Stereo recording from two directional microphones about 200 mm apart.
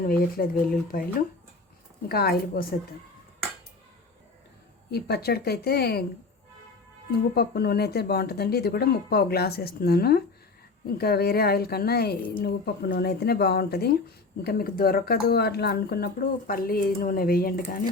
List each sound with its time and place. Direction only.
0.0 s speech: 45° left (ahead or behind)
2.0 s speech: 50° left (ahead or behind)
4.9 s speech: 55° left (ahead or behind)
7.3 s speech: 50° left (ahead or behind)